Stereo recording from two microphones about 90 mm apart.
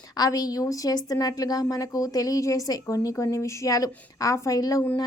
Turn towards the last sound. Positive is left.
turn(degrees=40)  # may be behind; listen again after turning